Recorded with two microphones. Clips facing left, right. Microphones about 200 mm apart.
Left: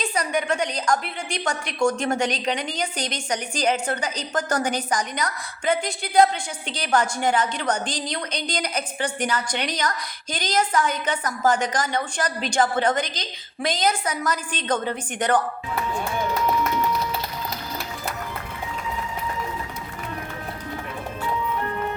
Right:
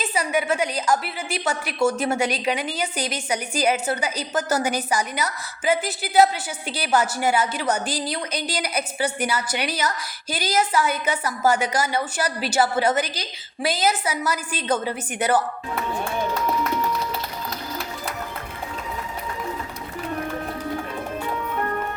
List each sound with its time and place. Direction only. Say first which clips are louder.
0.0 s a woman's voice: right 1 dB; 5° right (ahead or behind)